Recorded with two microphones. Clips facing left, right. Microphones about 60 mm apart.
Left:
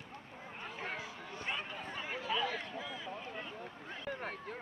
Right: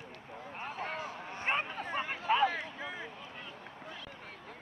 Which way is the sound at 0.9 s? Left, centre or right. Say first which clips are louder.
Right 4 dB; right.